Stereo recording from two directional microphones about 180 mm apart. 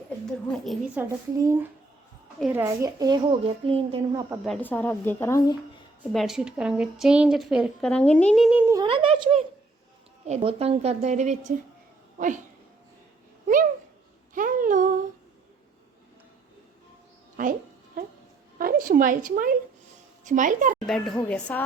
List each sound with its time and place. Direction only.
0.5 s a woman's voice: centre (ahead or behind)
1.0 s a woman's voice: 15° right (ahead or behind); by 4.2 s 30° right (ahead or behind)
4.4 s a woman's voice: 5° left (ahead or behind)
6.1 s a woman's voice: 5° right (ahead or behind)
8.1 s a woman's voice: 5° left (ahead or behind)
8.4 s speech: 10° right (ahead or behind)
8.7 s a woman's voice: 25° right (ahead or behind); by 12.4 s 45° right (ahead or behind)
14.3 s a sound: 50° right (ahead or behind)
17.4 s speech: 45° right (ahead or behind)
18.6 s a woman's voice: 50° right (ahead or behind)
20.8 s a woman's voice: centre (ahead or behind)